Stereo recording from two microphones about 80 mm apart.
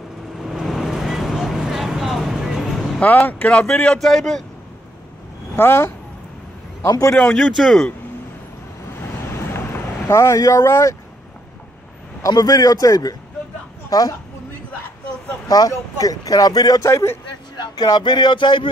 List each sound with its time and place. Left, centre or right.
0.4 s vehicle: centre
3.0 s speech: centre
5.6 s speech: left
7.3 s speech: centre
8.9 s vehicle: left
10.0 s speech: left
12.2 s speech: left
15.4 s a sound: left
16.0 s speech: left
17.6 s speech: left